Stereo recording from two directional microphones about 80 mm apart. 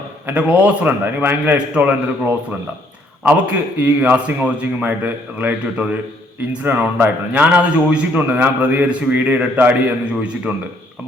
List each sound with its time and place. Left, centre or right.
0.3 s a man's voice: centre